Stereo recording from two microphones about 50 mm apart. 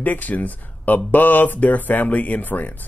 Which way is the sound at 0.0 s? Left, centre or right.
Left.